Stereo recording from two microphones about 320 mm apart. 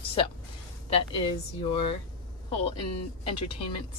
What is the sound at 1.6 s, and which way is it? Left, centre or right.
Speech, centre.